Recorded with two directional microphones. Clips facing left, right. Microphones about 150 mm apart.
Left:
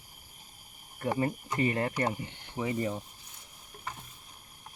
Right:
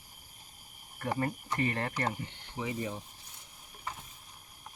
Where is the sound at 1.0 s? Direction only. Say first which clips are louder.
Left 3 dB; 15° left (ahead or behind).